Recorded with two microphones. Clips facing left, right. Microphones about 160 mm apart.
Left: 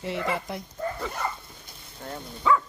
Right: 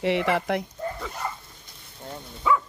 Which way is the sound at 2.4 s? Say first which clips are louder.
Even; 5° right (ahead or behind).